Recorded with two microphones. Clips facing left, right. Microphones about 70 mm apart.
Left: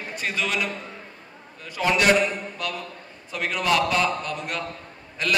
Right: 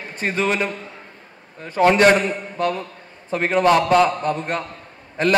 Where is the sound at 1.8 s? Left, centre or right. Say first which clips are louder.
Right 6 dB; right.